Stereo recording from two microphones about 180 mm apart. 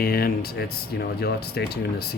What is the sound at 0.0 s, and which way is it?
Speech, 55° left (ahead or behind).